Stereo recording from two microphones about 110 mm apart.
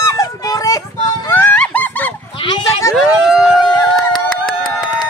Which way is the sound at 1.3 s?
15° left (ahead or behind).